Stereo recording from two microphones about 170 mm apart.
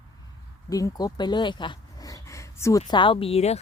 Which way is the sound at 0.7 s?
20° left (ahead or behind).